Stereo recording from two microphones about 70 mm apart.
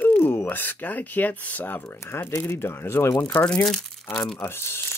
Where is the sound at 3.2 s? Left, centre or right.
Centre.